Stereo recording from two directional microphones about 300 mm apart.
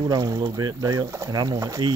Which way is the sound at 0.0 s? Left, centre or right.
Centre.